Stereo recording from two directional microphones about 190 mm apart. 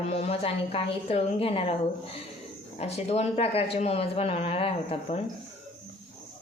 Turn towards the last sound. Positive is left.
turn(degrees=30)  # may be behind; listen again after turning